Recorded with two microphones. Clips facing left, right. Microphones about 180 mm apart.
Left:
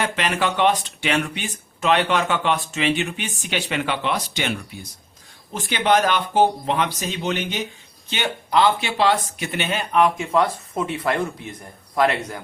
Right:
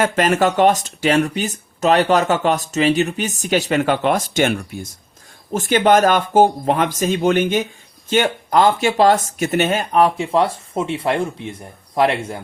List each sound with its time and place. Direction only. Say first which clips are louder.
0.0 s speech: right 7 dB; 45° right (ahead or behind); by 12.4 s 25° right (ahead or behind)